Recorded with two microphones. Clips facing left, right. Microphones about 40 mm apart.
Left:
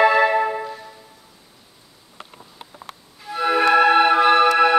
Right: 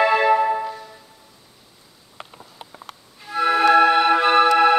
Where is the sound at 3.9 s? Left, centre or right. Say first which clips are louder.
Left 1 dB; centre.